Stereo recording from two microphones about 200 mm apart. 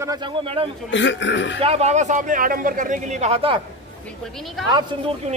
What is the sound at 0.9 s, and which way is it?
Speech, 65° left (ahead or behind).